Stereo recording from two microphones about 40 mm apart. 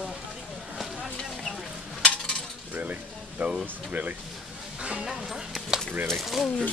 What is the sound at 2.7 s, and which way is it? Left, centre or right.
Stir, right.